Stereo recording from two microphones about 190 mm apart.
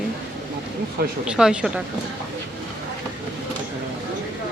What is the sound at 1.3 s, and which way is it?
Speech, 5° right (ahead or behind).